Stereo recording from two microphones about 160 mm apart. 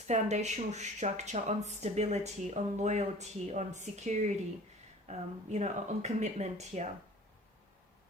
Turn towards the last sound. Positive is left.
turn(degrees=-45)  # may be behind; listen again after turning